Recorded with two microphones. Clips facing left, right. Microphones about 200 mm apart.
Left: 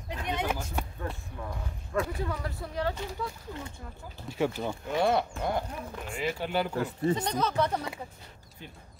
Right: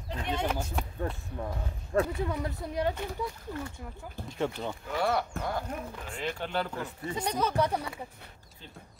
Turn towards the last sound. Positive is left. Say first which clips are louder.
# even
turn(degrees=-10)  # may be behind; listen again after turning